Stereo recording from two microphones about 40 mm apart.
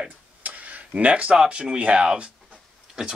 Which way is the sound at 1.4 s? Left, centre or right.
Right.